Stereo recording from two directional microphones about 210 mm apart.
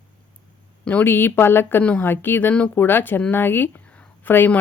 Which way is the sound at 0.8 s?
5° left (ahead or behind).